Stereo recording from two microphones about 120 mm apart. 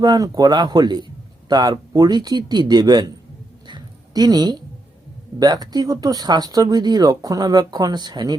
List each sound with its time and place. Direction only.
0.0 s speech: 35° right (ahead or behind)
3.7 s a sound: 35° right (ahead or behind)
5.4 s speech: 35° right (ahead or behind)